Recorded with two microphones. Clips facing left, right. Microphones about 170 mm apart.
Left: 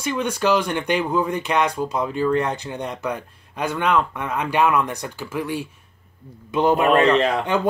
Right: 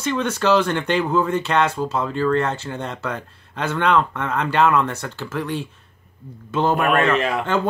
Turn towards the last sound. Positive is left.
turn(degrees=15)  # may be behind; listen again after turning